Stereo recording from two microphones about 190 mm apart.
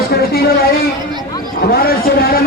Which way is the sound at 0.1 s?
55° left (ahead or behind).